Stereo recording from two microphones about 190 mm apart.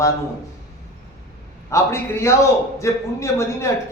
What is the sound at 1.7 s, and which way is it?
A man's voice, 15° left (ahead or behind).